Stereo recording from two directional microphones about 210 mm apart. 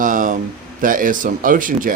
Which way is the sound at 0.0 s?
40° right (ahead or behind).